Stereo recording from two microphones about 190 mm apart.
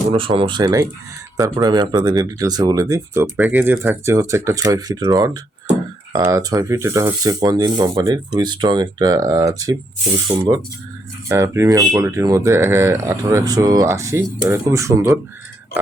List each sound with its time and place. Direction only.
0.1 s speech: 30° right (ahead or behind)
10.3 s speech: 35° right (ahead or behind)
11.3 s speech: 15° right (ahead or behind)